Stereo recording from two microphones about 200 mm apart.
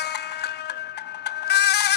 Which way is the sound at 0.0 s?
55° left (ahead or behind).